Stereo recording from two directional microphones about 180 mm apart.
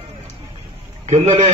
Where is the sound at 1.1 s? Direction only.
35° right (ahead or behind).